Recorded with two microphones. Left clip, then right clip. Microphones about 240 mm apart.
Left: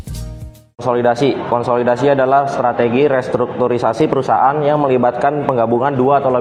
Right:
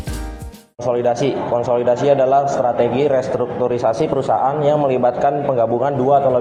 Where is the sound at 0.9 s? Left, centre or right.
Left.